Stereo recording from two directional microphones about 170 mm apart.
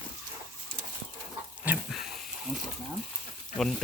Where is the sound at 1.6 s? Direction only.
10° right (ahead or behind).